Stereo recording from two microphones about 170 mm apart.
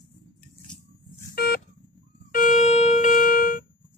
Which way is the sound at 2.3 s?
55° left (ahead or behind).